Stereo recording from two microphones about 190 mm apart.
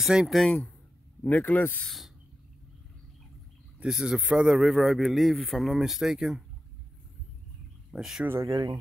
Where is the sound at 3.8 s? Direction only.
5° right (ahead or behind).